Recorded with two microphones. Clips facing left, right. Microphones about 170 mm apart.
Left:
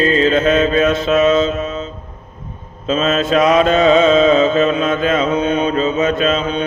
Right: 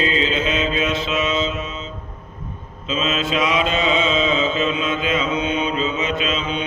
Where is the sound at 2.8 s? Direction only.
45° left (ahead or behind).